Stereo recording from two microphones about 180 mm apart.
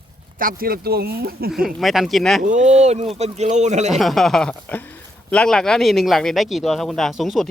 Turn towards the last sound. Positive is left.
turn(degrees=0)  # may be behind; listen again after turning